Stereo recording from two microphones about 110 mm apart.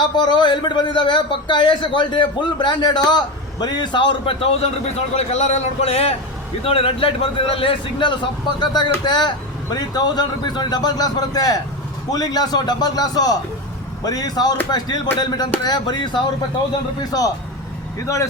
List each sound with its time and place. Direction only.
0.0 s a man's voice: 45° left (ahead or behind); by 18.3 s 30° left (ahead or behind)